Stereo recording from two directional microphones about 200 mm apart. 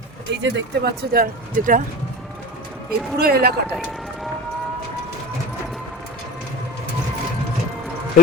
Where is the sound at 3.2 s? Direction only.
50° right (ahead or behind).